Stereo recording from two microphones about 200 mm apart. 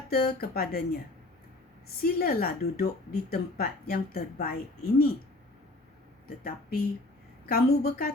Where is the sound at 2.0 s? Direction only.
50° left (ahead or behind).